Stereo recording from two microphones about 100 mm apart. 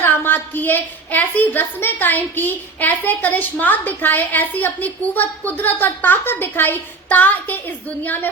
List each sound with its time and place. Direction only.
0.0 s a woman's voice: 20° left (ahead or behind)